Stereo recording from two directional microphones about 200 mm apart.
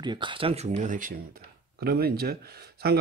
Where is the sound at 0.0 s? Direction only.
25° right (ahead or behind).